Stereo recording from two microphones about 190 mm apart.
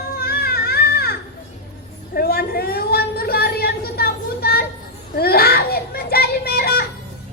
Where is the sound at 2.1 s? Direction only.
55° left (ahead or behind).